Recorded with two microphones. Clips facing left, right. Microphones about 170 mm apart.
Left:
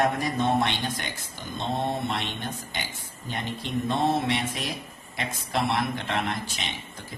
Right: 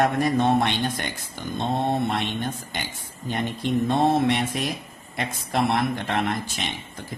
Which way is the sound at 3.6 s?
55° right (ahead or behind).